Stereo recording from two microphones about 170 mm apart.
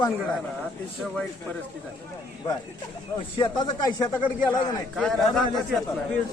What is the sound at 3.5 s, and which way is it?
Speech, 25° left (ahead or behind).